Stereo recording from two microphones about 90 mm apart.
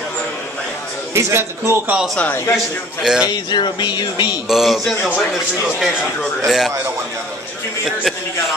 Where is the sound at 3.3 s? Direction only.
55° left (ahead or behind).